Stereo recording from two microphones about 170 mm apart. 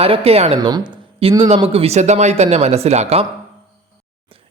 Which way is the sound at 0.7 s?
25° right (ahead or behind).